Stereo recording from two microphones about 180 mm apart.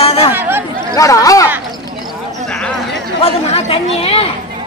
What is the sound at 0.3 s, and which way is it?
Chatter, 10° right (ahead or behind).